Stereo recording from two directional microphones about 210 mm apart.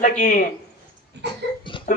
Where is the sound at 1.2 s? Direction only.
55° right (ahead or behind).